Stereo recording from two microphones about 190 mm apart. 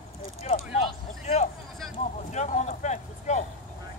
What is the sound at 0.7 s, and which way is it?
Vehicle, 35° left (ahead or behind).